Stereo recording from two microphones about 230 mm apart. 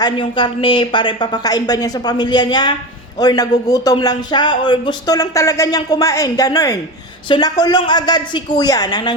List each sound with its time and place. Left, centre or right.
0.0 s a woman's voice: centre